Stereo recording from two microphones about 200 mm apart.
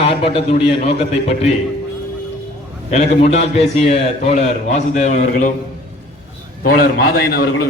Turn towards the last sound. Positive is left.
turn(degrees=50)  # may be behind; listen again after turning